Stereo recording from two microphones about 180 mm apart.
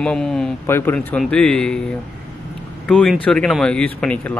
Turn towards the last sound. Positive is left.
turn(degrees=5)  # may be behind; listen again after turning